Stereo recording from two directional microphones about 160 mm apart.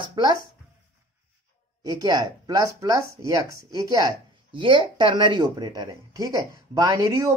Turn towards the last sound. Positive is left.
turn(degrees=-25)  # may be behind; listen again after turning